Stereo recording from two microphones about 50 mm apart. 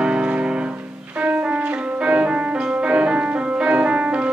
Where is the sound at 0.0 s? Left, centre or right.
Right.